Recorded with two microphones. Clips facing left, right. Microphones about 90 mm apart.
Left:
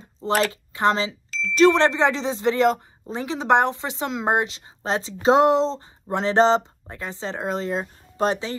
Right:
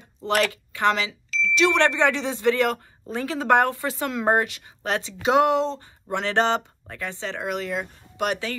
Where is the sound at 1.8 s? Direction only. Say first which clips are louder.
Left 1 dB; 25° left (ahead or behind).